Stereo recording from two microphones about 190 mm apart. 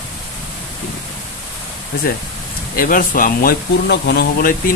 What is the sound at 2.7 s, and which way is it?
Speech, 45° left (ahead or behind).